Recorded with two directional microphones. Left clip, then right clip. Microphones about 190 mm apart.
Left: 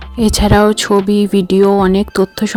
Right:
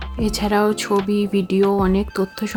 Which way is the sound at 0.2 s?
40° left (ahead or behind).